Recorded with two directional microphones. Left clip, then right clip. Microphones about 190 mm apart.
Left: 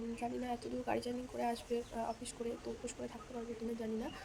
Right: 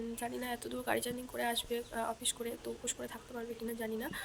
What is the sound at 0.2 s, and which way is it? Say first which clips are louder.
A woman's voice: even; centre (ahead or behind).